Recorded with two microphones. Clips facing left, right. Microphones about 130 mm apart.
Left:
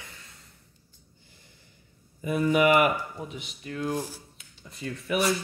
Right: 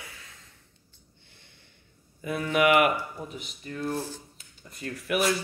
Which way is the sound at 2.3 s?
10° left (ahead or behind).